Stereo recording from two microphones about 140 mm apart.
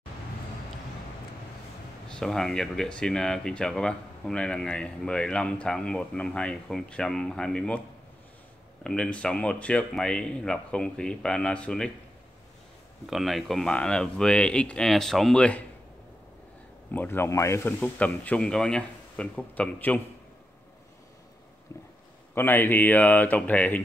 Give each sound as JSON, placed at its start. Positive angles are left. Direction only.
{"t": 2.0, "sound": "speech", "side_deg": 5}
{"t": 8.8, "sound": "speech", "side_deg": 5}
{"t": 13.1, "sound": "speech", "side_deg": 0}
{"t": 16.9, "sound": "speech", "side_deg": 15}
{"t": 17.7, "sound": "speech", "side_deg": 10}
{"t": 22.3, "sound": "speech", "side_deg": 15}